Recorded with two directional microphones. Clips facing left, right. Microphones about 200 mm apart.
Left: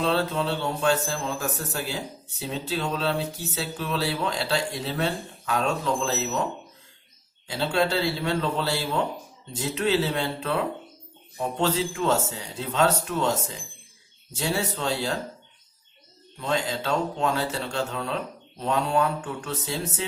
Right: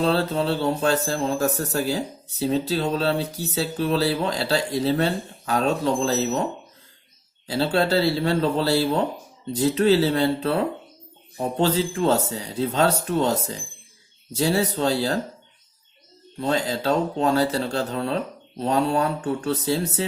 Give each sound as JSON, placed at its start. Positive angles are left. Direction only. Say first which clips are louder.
{"t": 0.0, "sound": "speech", "louder": "right 3 dB", "side_deg": -35}
{"t": 16.4, "sound": "speech", "louder": "right 4 dB", "side_deg": -35}